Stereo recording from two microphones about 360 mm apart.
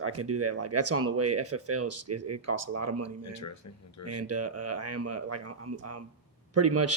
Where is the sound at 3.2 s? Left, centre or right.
Left.